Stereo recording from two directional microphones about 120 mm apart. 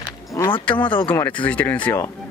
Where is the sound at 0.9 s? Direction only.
45° left (ahead or behind).